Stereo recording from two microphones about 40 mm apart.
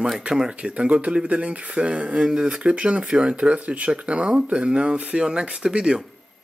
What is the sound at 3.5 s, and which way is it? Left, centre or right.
Speech, right.